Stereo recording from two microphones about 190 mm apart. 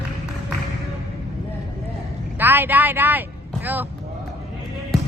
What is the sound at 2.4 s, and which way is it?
A man's voice, 10° right (ahead or behind).